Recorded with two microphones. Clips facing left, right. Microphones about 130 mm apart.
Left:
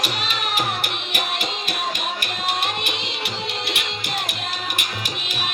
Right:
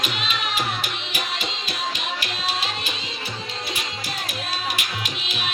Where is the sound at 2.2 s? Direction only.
55° left (ahead or behind).